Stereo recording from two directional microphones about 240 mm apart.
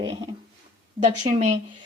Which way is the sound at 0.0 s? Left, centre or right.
Centre.